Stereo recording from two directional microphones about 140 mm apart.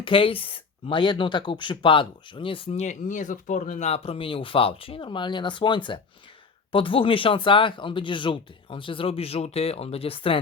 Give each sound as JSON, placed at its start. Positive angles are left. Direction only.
{"t": 0.0, "sound": "speech", "side_deg": 40}
{"t": 2.8, "sound": "speech", "side_deg": 65}